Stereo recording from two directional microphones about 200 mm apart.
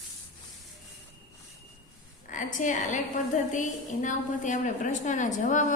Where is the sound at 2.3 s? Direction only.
40° left (ahead or behind).